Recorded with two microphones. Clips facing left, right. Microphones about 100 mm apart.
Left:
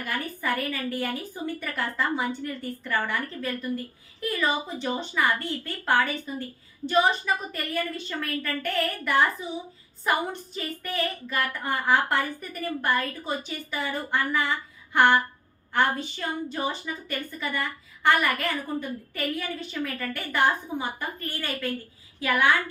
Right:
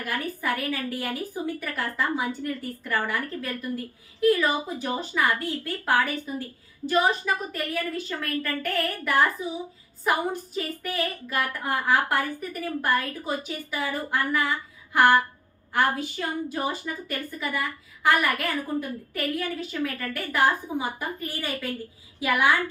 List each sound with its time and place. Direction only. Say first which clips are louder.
0.0 s a woman's voice: right 1 dB; 5° right (ahead or behind)